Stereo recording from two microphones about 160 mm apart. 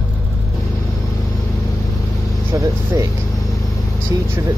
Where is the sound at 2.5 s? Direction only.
20° right (ahead or behind).